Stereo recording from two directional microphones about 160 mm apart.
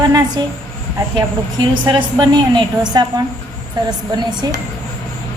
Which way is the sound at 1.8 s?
30° right (ahead or behind).